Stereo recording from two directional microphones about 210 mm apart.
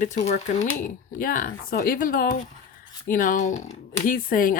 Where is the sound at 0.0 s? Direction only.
35° left (ahead or behind).